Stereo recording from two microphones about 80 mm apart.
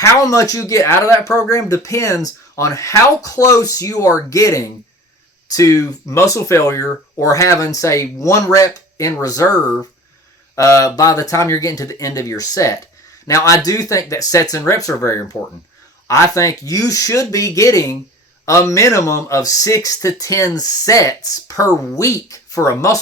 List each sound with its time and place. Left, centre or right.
0.0 s speech: left